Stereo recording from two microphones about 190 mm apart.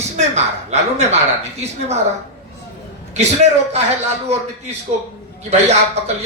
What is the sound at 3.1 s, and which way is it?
Speech, 35° right (ahead or behind).